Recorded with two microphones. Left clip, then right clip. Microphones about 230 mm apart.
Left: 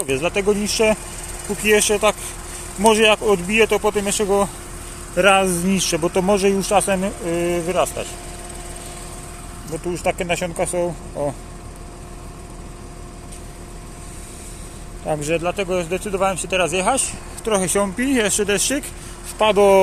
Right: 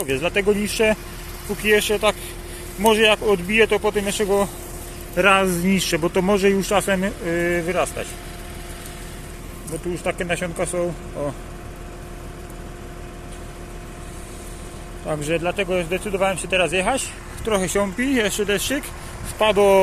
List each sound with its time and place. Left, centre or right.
0.0 s a man's voice: centre
9.9 s speech: centre
15.0 s speech: centre